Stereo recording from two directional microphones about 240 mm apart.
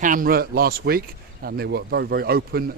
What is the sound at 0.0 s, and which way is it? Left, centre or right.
Speech, right.